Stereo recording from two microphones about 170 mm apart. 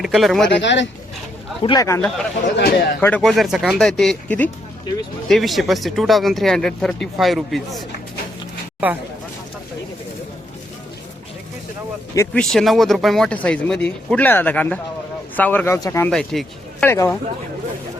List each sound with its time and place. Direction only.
0.0 s speech: centre (ahead or behind)
0.5 s speech: 90° left
1.6 s speech: 20° left (ahead or behind)
2.0 s speech: 5° left (ahead or behind)
2.6 s a man's voice: 75° left (ahead or behind)
3.2 s speech: centre (ahead or behind)
12.1 s speech: 15° left (ahead or behind)
12.4 s speech: centre (ahead or behind)
16.1 s speech: centre (ahead or behind)
16.9 s speech: 15° left (ahead or behind)